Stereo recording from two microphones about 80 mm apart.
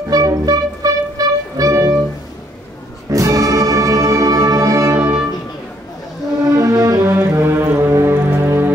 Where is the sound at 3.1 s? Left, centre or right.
Right.